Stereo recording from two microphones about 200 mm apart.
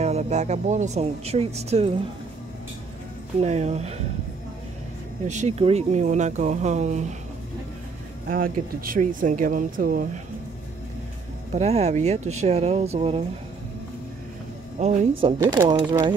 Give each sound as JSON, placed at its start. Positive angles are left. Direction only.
{"t": 0.0, "sound": "speech", "side_deg": -35}
{"t": 3.3, "sound": "speech", "side_deg": -35}
{"t": 5.3, "sound": "speech", "side_deg": -35}
{"t": 8.3, "sound": "speech", "side_deg": -45}
{"t": 11.5, "sound": "speech", "side_deg": -35}
{"t": 14.8, "sound": "speech", "side_deg": -35}